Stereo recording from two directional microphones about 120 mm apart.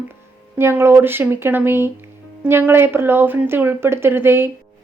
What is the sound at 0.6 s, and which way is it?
A woman's voice, 20° right (ahead or behind).